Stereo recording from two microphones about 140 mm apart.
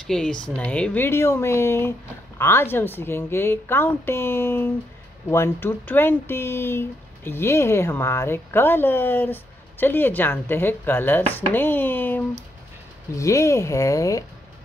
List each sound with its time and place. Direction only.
0.0 s speech: 5° left (ahead or behind); by 14.2 s 25° left (ahead or behind)